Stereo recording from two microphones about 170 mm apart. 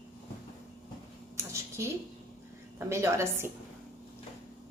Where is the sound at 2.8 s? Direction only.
15° right (ahead or behind).